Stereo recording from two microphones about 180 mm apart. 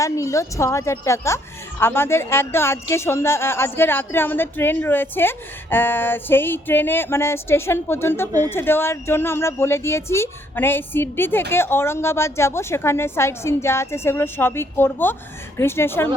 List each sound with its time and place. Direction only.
0.0 s speech: 15° left (ahead or behind)